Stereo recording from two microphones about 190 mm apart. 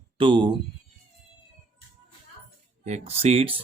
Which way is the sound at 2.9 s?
35° right (ahead or behind).